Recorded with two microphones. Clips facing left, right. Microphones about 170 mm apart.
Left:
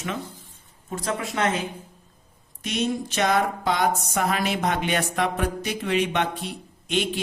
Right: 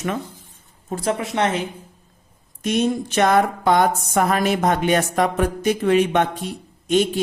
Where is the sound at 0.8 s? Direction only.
30° right (ahead or behind).